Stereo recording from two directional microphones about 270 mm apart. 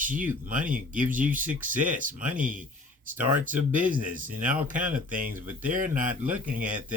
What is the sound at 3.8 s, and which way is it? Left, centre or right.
Speech, right.